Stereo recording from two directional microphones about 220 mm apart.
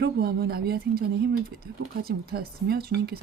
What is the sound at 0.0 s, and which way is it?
Speech, 45° right (ahead or behind).